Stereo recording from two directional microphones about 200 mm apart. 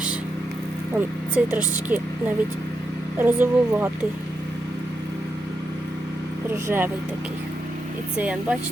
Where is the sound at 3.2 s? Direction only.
10° right (ahead or behind).